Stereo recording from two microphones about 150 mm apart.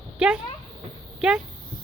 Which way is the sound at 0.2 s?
5° right (ahead or behind).